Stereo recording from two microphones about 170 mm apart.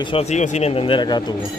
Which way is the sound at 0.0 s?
35° left (ahead or behind).